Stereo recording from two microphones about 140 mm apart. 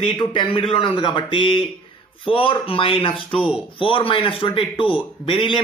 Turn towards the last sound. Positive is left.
turn(degrees=40)  # may be behind; listen again after turning